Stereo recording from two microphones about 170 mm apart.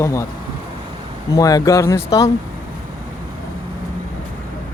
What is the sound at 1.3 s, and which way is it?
Speech, 20° left (ahead or behind).